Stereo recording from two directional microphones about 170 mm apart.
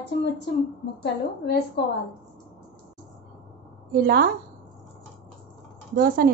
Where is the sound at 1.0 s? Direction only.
75° left (ahead or behind).